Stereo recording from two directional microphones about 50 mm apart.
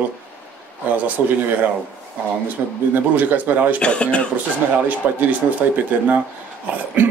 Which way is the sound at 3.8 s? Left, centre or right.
Left.